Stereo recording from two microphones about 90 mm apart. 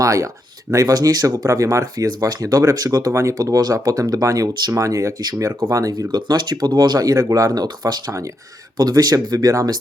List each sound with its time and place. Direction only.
0.0 s speech: 35° right (ahead or behind)
3.1 s speech: 35° right (ahead or behind)
6.1 s speech: 50° right (ahead or behind)